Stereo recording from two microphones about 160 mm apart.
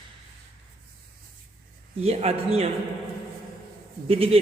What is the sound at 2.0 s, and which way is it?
Speech, 40° right (ahead or behind).